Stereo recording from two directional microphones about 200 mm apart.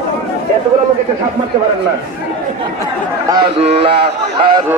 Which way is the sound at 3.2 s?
25° right (ahead or behind).